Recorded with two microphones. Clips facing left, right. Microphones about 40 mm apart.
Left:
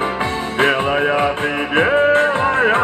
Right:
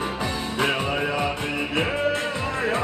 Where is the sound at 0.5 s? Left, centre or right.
Left.